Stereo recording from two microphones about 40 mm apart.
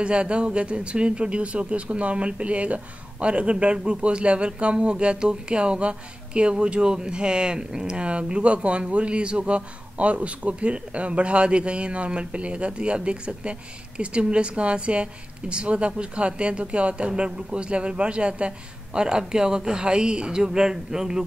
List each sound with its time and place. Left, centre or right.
0.0 s speech: right; by 21.2 s centre